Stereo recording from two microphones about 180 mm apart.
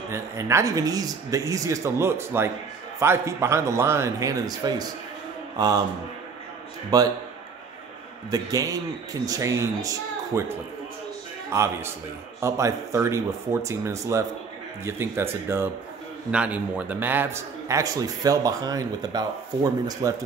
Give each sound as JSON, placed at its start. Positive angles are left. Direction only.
{"t": 0.1, "sound": "a man's voice", "side_deg": -15}
{"t": 6.9, "sound": "a man's voice", "side_deg": -20}
{"t": 8.3, "sound": "a man's voice", "side_deg": -20}